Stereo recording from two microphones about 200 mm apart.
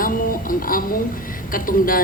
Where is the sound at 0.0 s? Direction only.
45° left (ahead or behind).